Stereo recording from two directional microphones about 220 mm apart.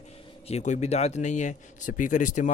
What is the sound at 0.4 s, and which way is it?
A man's voice, 30° left (ahead or behind).